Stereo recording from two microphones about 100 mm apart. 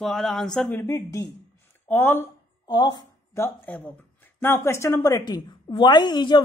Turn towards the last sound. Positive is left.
turn(degrees=50)  # may be behind; listen again after turning